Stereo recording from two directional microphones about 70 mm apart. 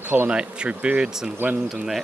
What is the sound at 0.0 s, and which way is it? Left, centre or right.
Speech, right.